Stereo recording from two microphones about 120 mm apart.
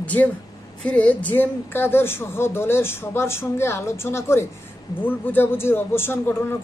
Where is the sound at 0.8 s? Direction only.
10° left (ahead or behind).